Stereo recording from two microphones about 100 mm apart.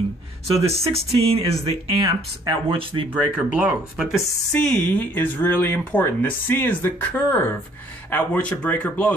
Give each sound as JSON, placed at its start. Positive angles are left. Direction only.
{"t": 0.7, "sound": "speech", "side_deg": -85}
{"t": 2.0, "sound": "speech", "side_deg": -55}
{"t": 3.1, "sound": "speech", "side_deg": -10}
{"t": 4.5, "sound": "speech", "side_deg": 10}